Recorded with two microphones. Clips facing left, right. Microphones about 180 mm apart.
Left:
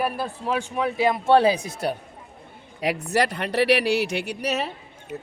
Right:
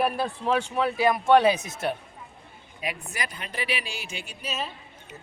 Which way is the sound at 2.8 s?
75° left (ahead or behind).